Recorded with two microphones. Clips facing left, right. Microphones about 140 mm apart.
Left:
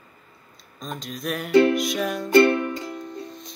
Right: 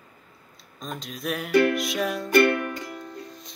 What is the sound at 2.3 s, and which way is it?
Music, 25° left (ahead or behind).